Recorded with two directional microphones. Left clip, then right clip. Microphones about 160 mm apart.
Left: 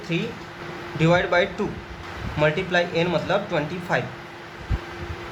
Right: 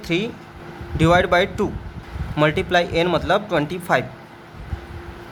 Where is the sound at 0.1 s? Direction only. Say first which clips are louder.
Right 5 dB; 55° right (ahead or behind).